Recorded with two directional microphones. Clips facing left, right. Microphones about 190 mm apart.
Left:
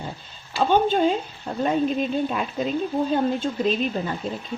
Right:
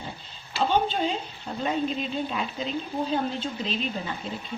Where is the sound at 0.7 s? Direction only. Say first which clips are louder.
Left 7 dB; 50° left (ahead or behind).